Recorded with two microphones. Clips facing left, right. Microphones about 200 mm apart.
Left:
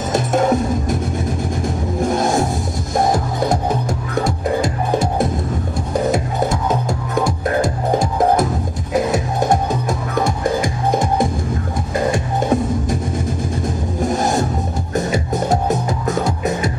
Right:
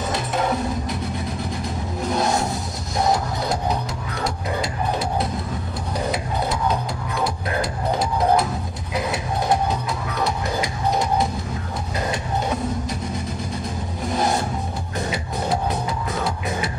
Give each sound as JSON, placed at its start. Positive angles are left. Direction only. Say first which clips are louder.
{"t": 0.1, "sound": "music", "louder": "left 9 dB", "side_deg": 45}
{"t": 14.0, "sound": "a sound", "louder": "left 4 dB", "side_deg": 45}
{"t": 15.0, "sound": "music", "louder": "left 8 dB", "side_deg": 45}